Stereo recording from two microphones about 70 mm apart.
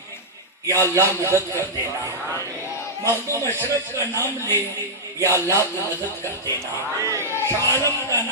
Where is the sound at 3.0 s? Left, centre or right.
Right.